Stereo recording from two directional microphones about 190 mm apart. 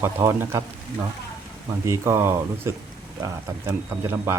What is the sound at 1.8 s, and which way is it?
Speech, 15° right (ahead or behind).